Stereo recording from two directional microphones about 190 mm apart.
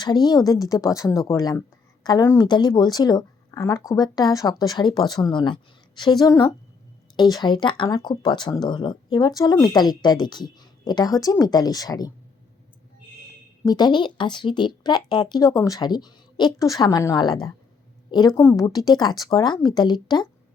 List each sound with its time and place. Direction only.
0.0 s speech: 20° left (ahead or behind)
13.7 s speech: 20° left (ahead or behind)